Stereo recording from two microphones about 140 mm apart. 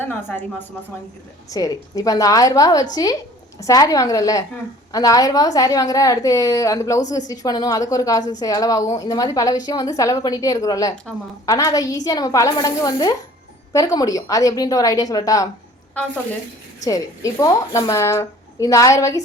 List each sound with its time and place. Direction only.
0.0 s speech: 15° left (ahead or behind)
1.5 s a woman's voice: 25° left (ahead or behind)
16.8 s a woman's voice: 25° left (ahead or behind)